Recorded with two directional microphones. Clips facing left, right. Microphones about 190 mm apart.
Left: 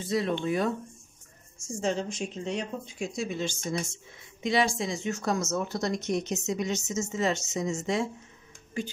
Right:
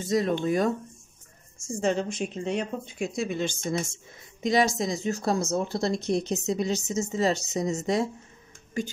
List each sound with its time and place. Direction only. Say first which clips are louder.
0.0 s speech: right 3 dB; 45° right (ahead or behind)
1.6 s speech: right 3 dB; 55° right (ahead or behind)
4.4 s speech: right 3 dB; 40° right (ahead or behind)